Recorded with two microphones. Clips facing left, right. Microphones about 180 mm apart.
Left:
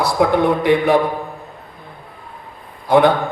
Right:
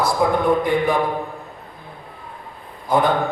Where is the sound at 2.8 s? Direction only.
70° left (ahead or behind).